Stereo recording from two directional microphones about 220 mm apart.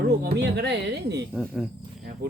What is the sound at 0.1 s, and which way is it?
Speech, 50° right (ahead or behind).